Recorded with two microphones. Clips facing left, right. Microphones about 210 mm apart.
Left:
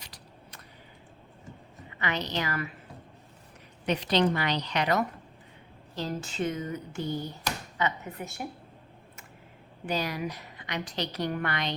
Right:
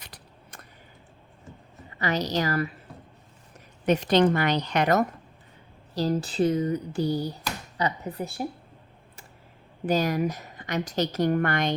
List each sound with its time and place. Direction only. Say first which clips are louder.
0.0 s a sound: right 1 dB; 55° right (ahead or behind)
2.0 s speech: right 5 dB; 40° right (ahead or behind)
3.8 s a woman's voice: right 5 dB; 45° right (ahead or behind)
5.9 s speech: right 8 dB; 35° right (ahead or behind)
9.8 s a woman's voice: right 7 dB; 45° right (ahead or behind)